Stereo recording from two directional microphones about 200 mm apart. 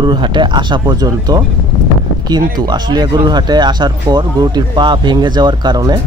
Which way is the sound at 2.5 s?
20° right (ahead or behind).